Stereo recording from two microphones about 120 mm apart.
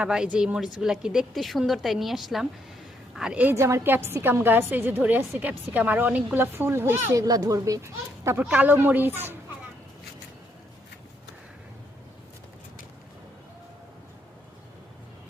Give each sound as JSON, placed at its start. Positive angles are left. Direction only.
{"t": 0.0, "sound": "a woman's voice", "side_deg": -5}
{"t": 3.5, "sound": "a woman's voice", "side_deg": -25}